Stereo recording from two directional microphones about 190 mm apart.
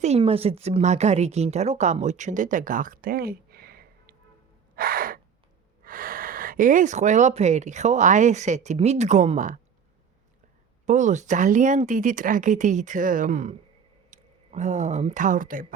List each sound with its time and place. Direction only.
0.0 s speech: 30° right (ahead or behind); by 4.1 s 50° right (ahead or behind)
4.7 s gasp: 50° right (ahead or behind)
5.8 s speech: 50° right (ahead or behind)
10.8 s speech: 40° right (ahead or behind)